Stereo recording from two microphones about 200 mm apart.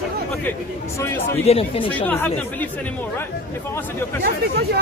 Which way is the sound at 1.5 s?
30° left (ahead or behind).